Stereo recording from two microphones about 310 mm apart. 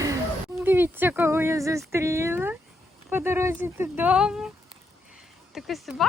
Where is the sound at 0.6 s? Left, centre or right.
Centre.